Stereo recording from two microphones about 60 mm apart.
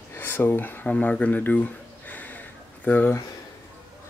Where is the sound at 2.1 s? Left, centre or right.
Left.